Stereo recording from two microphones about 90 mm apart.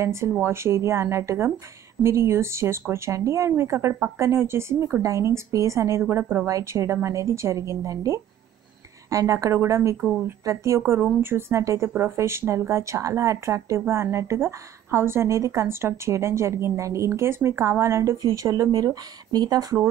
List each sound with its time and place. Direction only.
0.0 s speech: 30° right (ahead or behind); by 19.8 s 45° right (ahead or behind)